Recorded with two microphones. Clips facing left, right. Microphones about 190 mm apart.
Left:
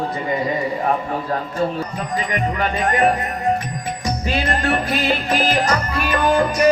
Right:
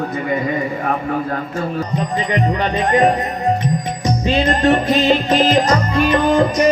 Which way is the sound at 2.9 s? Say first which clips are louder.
Right 4 dB; 30° right (ahead or behind).